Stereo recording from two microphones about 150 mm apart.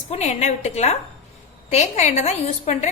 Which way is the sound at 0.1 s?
50° left (ahead or behind).